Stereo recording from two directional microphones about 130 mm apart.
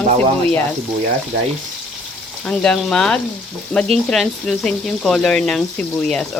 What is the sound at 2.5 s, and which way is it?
Speech, 5° left (ahead or behind).